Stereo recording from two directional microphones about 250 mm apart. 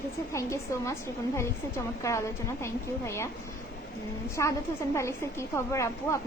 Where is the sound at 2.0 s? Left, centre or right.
Centre.